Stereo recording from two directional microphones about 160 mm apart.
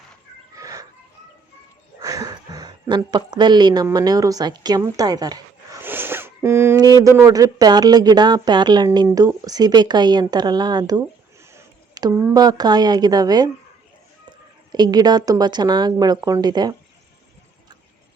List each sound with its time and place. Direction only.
0.5 s a sound: 20° right (ahead or behind)
2.0 s a sound: 20° right (ahead or behind)
3.8 s speech: 25° right (ahead or behind)
5.8 s zipper: 15° right (ahead or behind)
7.0 s a woman's voice: 20° right (ahead or behind)
14.7 s a woman's voice: 25° right (ahead or behind)